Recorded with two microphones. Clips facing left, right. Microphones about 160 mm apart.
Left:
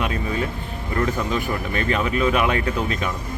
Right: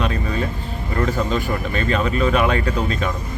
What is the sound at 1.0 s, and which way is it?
Speech, 15° left (ahead or behind).